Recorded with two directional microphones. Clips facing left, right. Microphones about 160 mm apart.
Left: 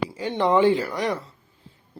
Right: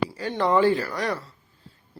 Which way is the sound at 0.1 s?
20° left (ahead or behind).